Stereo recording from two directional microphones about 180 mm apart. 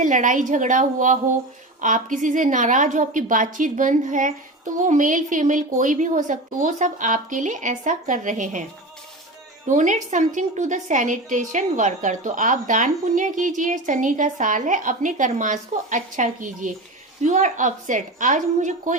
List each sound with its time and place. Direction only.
0.0 s a woman's voice: 45° right (ahead or behind)
9.6 s a woman's voice: 45° right (ahead or behind)